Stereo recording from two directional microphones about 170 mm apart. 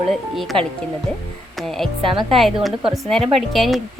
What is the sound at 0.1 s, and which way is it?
Speech, centre (ahead or behind).